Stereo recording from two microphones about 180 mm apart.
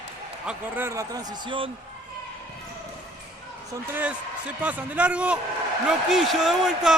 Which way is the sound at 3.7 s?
10° right (ahead or behind).